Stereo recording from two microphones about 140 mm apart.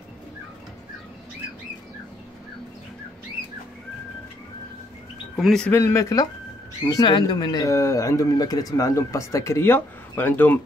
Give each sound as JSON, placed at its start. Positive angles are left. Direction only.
{"t": 5.3, "sound": "speech", "side_deg": 5}
{"t": 5.7, "sound": "speech", "side_deg": 20}